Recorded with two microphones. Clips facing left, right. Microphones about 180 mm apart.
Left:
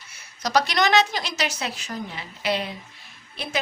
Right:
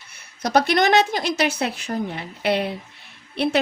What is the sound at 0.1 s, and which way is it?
Speech, 55° right (ahead or behind).